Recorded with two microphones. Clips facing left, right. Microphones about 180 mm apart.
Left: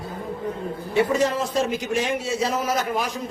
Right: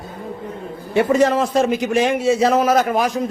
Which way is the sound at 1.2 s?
65° right (ahead or behind).